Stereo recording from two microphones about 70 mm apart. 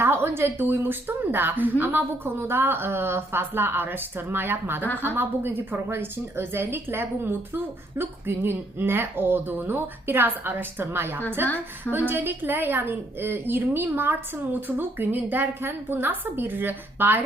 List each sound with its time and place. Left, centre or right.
0.0 s a woman's voice: right